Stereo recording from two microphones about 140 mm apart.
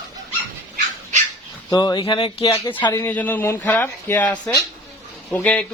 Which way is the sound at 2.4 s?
25° left (ahead or behind).